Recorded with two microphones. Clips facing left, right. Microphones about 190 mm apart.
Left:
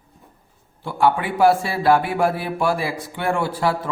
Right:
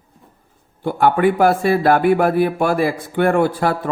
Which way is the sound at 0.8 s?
50° right (ahead or behind).